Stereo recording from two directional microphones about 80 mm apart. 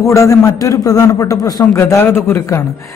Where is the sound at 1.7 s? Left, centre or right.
Left.